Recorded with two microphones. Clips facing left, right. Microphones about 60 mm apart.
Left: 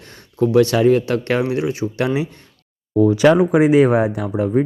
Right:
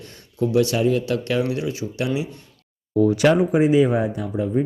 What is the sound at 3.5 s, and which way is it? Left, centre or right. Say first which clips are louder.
Speech: left 4 dB; left.